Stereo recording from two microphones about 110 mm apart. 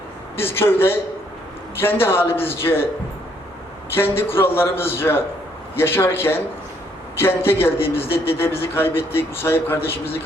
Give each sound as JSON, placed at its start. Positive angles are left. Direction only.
{"t": 0.3, "sound": "a man's voice", "side_deg": 20}
{"t": 3.9, "sound": "a man's voice", "side_deg": 20}